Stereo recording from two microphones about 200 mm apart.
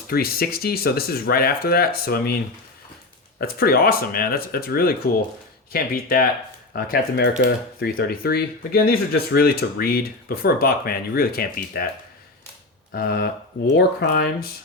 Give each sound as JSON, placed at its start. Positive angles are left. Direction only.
{"t": 0.1, "sound": "speech", "side_deg": 50}
{"t": 3.4, "sound": "speech", "side_deg": 50}
{"t": 12.9, "sound": "speech", "side_deg": 50}